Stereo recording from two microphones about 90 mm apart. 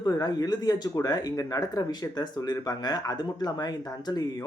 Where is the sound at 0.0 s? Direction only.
50° left (ahead or behind).